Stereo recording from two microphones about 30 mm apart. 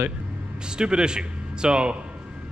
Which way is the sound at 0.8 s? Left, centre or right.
Right.